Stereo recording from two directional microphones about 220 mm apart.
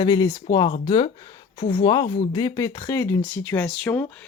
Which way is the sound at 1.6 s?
25° left (ahead or behind).